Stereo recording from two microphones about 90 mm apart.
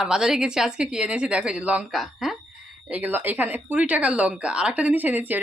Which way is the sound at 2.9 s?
20° right (ahead or behind).